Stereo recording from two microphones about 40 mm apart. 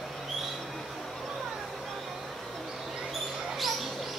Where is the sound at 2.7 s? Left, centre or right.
Centre.